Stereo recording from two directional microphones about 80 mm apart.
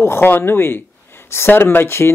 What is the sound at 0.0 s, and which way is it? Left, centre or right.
Speech, left.